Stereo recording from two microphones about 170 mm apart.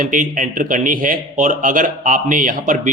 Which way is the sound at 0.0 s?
50° right (ahead or behind).